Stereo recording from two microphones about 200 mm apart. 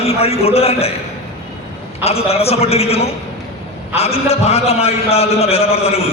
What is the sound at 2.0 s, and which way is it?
A man's voice, 30° left (ahead or behind).